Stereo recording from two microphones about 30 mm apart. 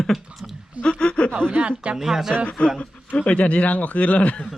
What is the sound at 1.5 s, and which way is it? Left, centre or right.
Speech, right.